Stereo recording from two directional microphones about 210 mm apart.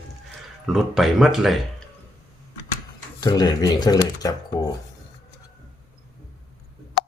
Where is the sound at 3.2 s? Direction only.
20° left (ahead or behind).